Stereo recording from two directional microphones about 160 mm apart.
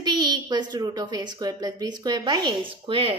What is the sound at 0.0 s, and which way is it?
A woman's voice, 25° right (ahead or behind).